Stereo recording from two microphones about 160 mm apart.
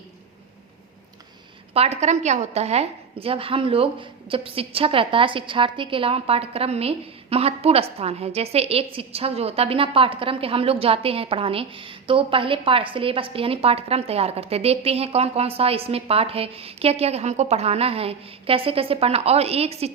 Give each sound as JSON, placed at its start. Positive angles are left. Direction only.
{"t": 1.7, "sound": "a woman's voice", "side_deg": -40}